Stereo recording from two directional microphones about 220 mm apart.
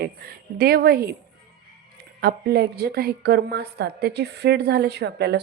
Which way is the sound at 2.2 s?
45° right (ahead or behind).